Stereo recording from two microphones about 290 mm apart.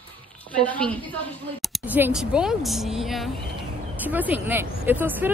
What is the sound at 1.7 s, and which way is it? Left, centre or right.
Speech, centre.